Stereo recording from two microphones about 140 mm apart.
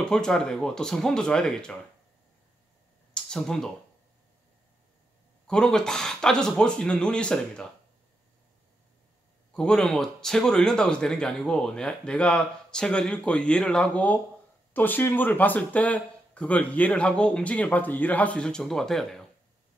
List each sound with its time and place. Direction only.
0.0 s a man's voice: 5° left (ahead or behind)
3.3 s a man's voice: 5° left (ahead or behind)
5.5 s a man's voice: 5° left (ahead or behind)
9.5 s a man's voice: 5° left (ahead or behind)